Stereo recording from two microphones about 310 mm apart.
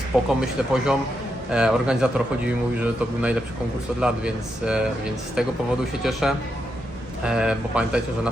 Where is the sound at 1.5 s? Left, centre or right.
Centre.